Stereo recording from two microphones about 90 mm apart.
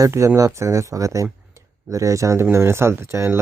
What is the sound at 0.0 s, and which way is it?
Speech, 35° right (ahead or behind).